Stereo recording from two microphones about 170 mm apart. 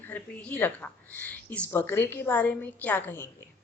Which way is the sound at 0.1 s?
10° left (ahead or behind).